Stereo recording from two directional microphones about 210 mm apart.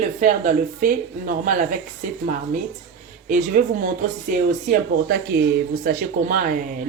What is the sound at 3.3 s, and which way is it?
Speech, 40° right (ahead or behind).